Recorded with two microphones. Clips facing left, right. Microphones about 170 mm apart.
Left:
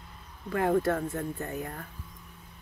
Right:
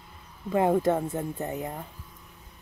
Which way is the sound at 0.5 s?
20° right (ahead or behind).